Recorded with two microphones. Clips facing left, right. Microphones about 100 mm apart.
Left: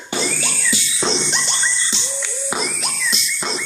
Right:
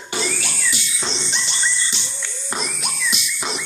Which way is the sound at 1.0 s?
85° left.